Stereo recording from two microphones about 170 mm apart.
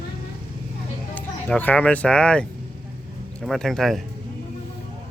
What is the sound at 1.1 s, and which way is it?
A child's voice, 10° left (ahead or behind).